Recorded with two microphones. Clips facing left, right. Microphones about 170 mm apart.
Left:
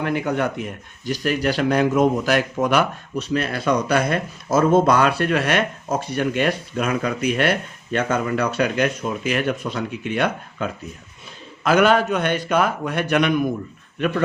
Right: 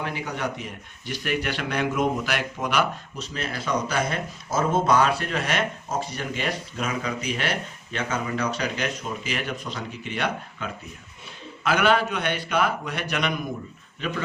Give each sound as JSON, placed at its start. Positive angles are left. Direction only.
{"t": 0.0, "sound": "a man's voice", "side_deg": 55}